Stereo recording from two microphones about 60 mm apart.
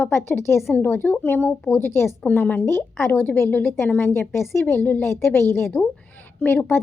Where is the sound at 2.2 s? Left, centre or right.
Left.